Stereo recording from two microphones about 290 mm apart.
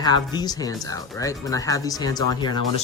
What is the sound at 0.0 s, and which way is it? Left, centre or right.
Speech, centre.